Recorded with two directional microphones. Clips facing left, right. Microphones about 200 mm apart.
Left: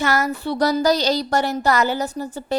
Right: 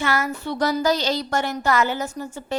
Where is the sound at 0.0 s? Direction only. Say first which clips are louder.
Left 3 dB; 40° left (ahead or behind).